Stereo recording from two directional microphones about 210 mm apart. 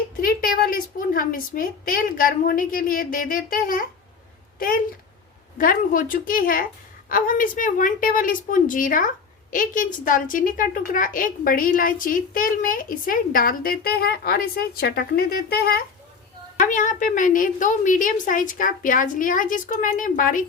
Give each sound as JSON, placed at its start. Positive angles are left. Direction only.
{"t": 0.2, "sound": "a woman's voice", "side_deg": 40}
{"t": 5.5, "sound": "a woman's voice", "side_deg": 40}